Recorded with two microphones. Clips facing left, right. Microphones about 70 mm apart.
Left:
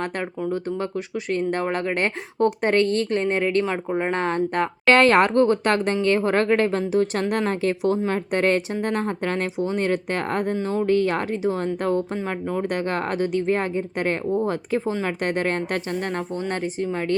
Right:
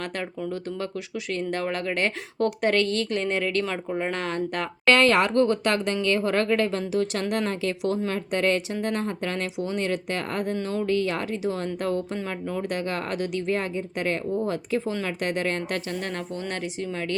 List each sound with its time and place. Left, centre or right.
0.0 s speech: left
10.5 s speech: left